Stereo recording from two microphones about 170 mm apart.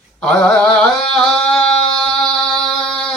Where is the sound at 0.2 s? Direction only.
5° left (ahead or behind).